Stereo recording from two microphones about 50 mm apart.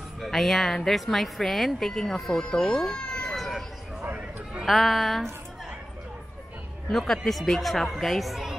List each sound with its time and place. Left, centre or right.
0.2 s a woman's voice: centre
3.3 s a sound: centre
4.0 s chatter: right
4.6 s a woman's voice: centre
6.9 s a woman's voice: centre